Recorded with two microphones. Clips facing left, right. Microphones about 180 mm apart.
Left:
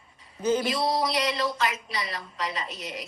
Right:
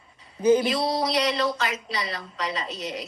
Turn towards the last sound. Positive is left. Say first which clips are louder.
# right 3 dB
turn(degrees=-25)  # may be behind; listen again after turning